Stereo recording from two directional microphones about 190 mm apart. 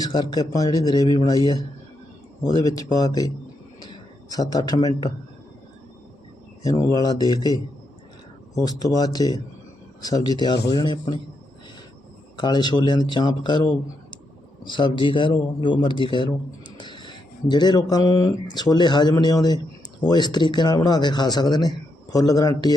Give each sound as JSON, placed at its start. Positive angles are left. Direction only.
{"t": 0.0, "sound": "speech", "side_deg": 20}
{"t": 2.4, "sound": "speech", "side_deg": 20}
{"t": 3.8, "sound": "a sound", "side_deg": 20}
{"t": 6.6, "sound": "speech", "side_deg": 20}
{"t": 12.4, "sound": "speech", "side_deg": 25}